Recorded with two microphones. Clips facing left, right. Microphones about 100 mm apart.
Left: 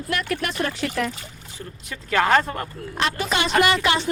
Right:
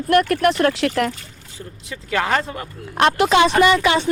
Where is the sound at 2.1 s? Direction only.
10° right (ahead or behind).